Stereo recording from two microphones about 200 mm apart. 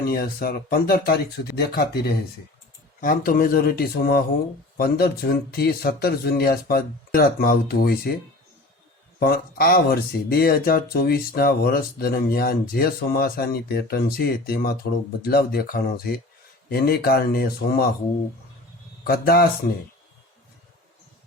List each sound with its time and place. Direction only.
0.0 s speech: 50° left (ahead or behind)
3.0 s speech: 45° left (ahead or behind)
9.1 s speech: 50° left (ahead or behind)
19.0 s speech: 50° left (ahead or behind)